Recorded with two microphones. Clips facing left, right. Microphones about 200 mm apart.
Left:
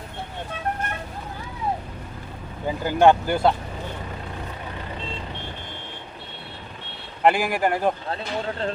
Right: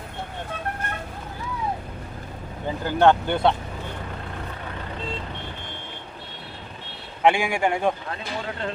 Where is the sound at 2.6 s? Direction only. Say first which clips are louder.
Left 1 dB; 10° left (ahead or behind).